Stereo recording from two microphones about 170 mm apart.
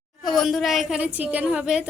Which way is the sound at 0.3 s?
Centre (ahead or behind).